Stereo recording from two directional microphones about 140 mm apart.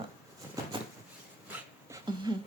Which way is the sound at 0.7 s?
35° right (ahead or behind).